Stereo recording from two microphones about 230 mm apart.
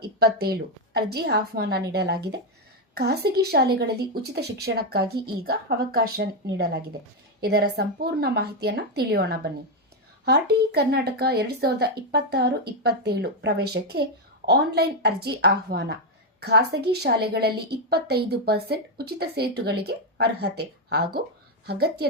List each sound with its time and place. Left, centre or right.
0.0 s speech: right